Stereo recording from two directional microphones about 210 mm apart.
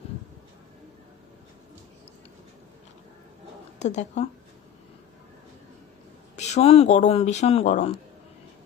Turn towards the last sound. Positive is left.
turn(degrees=30)  # may be behind; listen again after turning